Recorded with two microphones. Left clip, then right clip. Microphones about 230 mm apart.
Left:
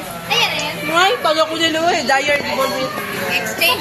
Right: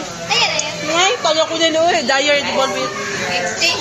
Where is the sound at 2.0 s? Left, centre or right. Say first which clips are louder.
Even; right.